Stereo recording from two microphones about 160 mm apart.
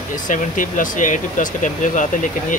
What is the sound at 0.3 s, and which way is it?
Speech, 55° left (ahead or behind).